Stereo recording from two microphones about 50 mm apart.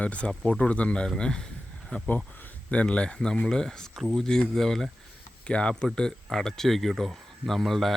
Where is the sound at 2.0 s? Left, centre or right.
Left.